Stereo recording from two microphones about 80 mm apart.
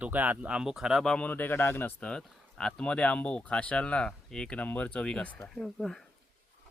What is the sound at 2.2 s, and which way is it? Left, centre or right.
Speech, centre.